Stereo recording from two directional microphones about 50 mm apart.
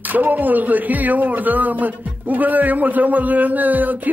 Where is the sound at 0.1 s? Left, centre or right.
Right.